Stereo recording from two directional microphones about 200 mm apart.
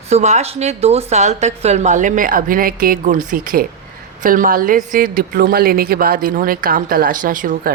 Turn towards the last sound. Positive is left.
turn(degrees=-40)  # may be behind; listen again after turning